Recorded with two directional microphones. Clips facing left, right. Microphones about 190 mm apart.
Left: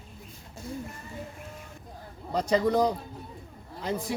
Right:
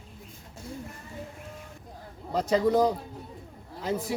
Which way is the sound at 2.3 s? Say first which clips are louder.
Right 1 dB; 5° right (ahead or behind).